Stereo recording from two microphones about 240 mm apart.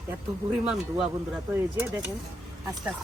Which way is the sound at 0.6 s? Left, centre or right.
Centre.